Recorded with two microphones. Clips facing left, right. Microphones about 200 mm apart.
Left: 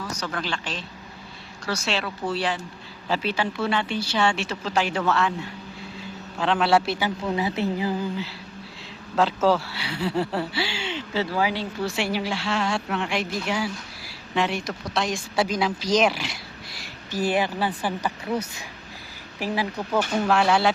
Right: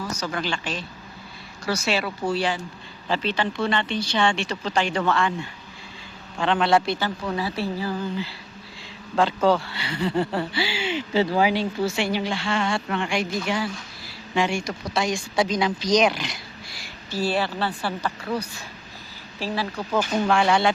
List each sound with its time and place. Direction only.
0.0 s speech: 5° right (ahead or behind); by 7.9 s 20° left (ahead or behind)
9.1 s speech: 5° left (ahead or behind); by 11.6 s 20° right (ahead or behind)
11.8 s speech: centre (ahead or behind)
17.1 s speech: 15° left (ahead or behind)
20.0 s speech: 5° left (ahead or behind)